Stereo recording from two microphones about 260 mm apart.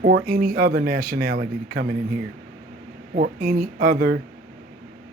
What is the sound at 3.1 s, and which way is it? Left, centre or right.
Speech, right.